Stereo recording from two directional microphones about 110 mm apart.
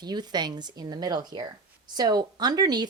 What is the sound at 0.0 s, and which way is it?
Speech, 40° right (ahead or behind).